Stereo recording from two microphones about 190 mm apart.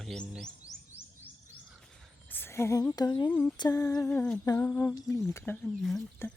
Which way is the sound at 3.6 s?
20° left (ahead or behind).